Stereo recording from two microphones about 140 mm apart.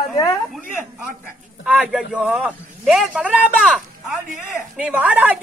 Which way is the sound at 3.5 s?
5° left (ahead or behind).